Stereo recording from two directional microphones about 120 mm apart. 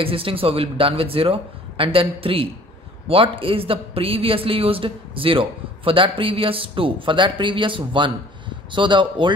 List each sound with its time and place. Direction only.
0.0 s a man's voice: 50° right (ahead or behind)